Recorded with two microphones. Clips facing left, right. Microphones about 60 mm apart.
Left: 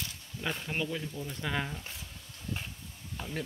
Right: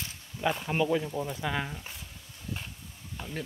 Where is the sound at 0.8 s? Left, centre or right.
Right.